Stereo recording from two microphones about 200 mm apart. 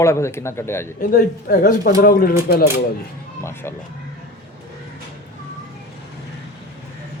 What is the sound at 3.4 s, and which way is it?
Speech, 15° left (ahead or behind).